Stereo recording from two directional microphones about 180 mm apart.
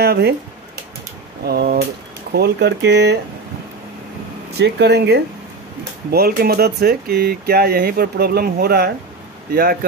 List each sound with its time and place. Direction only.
0.0 s speech: 65° right (ahead or behind)
1.4 s speech: 60° right (ahead or behind)
4.6 s speech: 70° right (ahead or behind)
6.1 s speech: 55° right (ahead or behind)